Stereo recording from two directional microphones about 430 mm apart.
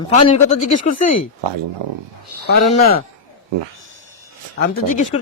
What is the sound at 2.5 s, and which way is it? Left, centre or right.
Speech, left.